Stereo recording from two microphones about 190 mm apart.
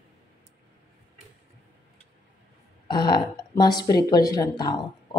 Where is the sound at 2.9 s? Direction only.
25° left (ahead or behind).